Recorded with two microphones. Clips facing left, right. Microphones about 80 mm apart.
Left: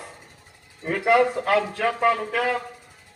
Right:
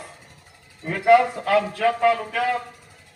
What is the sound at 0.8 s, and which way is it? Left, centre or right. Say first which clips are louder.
A man's voice: right 3 dB; left.